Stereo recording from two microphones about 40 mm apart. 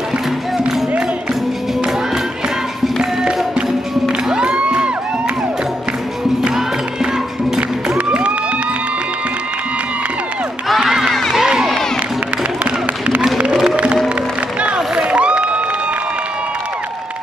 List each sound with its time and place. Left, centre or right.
3.0 s music: right
8.1 s crowd: right
10.9 s a sound: centre
11.3 s crowd: centre
13.7 s music: right
15.0 s a sound: right